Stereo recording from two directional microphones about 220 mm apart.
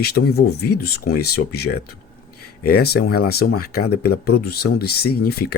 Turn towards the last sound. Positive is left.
turn(degrees=45)  # may be behind; listen again after turning